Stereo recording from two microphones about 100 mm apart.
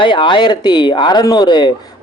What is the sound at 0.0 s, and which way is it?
A man's voice, 55° left (ahead or behind).